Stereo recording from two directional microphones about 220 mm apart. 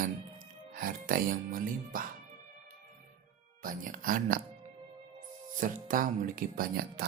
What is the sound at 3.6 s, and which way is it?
Speech, 40° right (ahead or behind).